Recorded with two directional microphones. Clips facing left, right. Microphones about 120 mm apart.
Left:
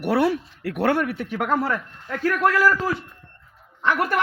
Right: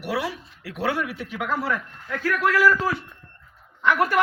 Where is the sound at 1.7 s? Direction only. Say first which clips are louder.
Left 1 dB; 30° left (ahead or behind).